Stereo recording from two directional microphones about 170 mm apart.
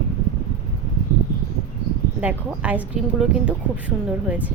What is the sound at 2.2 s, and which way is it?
A woman's voice, 10° right (ahead or behind).